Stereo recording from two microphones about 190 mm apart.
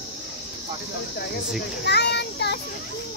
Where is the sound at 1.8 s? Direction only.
60° left (ahead or behind).